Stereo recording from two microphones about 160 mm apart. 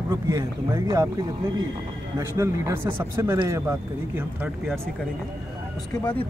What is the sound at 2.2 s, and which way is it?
Speech, 20° right (ahead or behind).